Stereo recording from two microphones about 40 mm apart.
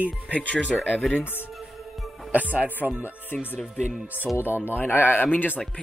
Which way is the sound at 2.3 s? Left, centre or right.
Right.